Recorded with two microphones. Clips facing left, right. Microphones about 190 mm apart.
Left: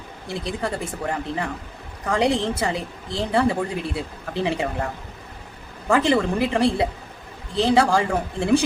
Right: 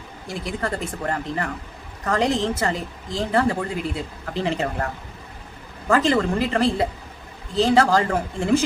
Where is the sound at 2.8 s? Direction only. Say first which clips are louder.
Even; 15° right (ahead or behind).